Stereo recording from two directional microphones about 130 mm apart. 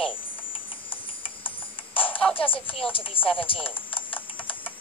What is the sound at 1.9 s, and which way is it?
Music, 15° left (ahead or behind).